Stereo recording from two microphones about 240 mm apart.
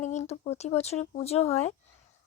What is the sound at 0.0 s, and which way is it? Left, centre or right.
Speech, left.